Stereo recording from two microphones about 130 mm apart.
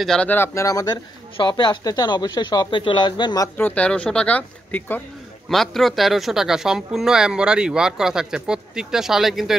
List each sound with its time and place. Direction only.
0.0 s speech: 5° left (ahead or behind); by 0.9 s 25° left (ahead or behind)
1.3 s speech: 35° left (ahead or behind)
3.5 s speech: 10° left (ahead or behind)
5.5 s speech: centre (ahead or behind)